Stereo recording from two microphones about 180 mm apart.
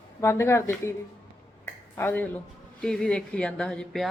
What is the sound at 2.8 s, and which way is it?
Speech, 5° left (ahead or behind).